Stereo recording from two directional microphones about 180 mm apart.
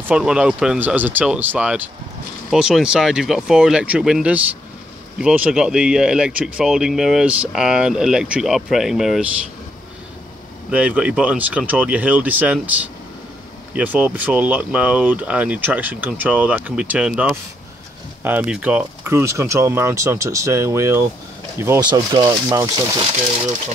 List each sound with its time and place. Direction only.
0.1 s speech: 5° right (ahead or behind)
10.7 s speech: 10° right (ahead or behind)
13.7 s speech: 10° right (ahead or behind)